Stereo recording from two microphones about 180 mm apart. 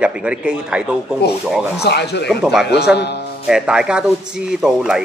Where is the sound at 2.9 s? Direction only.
65° left (ahead or behind).